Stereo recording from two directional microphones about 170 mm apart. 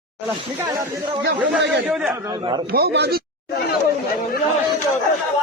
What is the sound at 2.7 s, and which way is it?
Speech, 75° right (ahead or behind).